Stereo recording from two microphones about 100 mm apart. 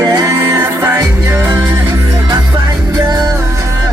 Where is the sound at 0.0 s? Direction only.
40° right (ahead or behind); by 1.5 s 25° right (ahead or behind).